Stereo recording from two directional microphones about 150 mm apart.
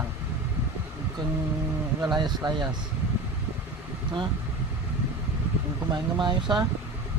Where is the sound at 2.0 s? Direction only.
30° right (ahead or behind).